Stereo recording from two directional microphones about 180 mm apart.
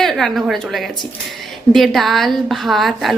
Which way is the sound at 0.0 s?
Centre (ahead or behind).